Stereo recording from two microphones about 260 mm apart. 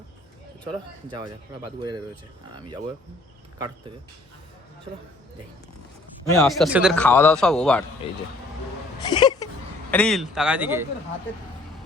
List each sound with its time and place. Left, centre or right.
1.6 s speech: centre
6.2 s a man's voice: centre
6.5 s a man's voice: centre
9.0 s speech: centre
9.9 s a man's voice: centre